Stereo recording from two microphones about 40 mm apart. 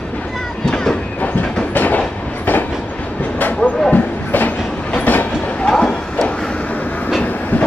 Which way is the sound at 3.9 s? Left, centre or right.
Left.